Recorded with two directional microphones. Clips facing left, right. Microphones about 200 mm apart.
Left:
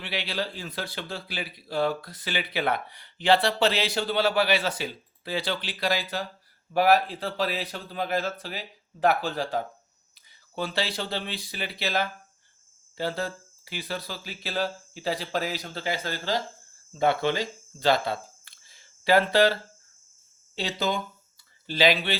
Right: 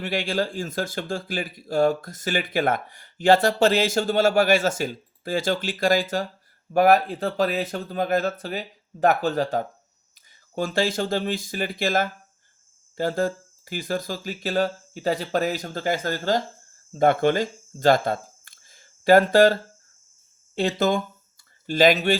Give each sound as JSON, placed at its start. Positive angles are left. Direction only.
{"t": 0.0, "sound": "speech", "side_deg": -45}
{"t": 20.6, "sound": "speech", "side_deg": -50}